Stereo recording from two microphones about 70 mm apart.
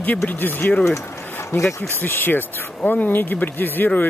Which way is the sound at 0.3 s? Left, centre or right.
Left.